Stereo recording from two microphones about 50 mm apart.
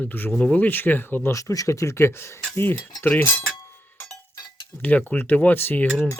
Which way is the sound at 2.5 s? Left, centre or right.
Left.